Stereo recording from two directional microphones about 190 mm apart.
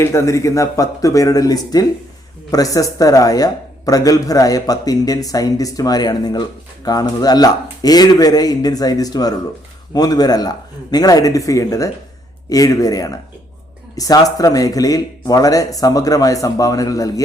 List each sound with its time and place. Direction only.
0.0 s speech: 15° left (ahead or behind)